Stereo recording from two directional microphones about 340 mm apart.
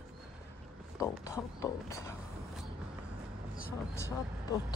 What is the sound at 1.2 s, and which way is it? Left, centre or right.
Speech, centre.